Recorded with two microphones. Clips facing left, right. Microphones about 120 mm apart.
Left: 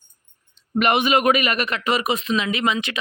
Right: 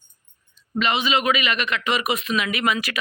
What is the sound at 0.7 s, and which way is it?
A man's voice, 55° left (ahead or behind).